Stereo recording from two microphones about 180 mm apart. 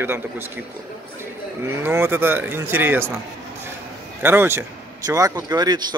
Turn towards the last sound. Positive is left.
turn(degrees=-25)  # may be behind; listen again after turning